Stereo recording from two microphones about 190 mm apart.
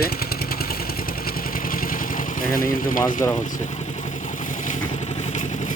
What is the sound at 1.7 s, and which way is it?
Vehicle, 50° left (ahead or behind).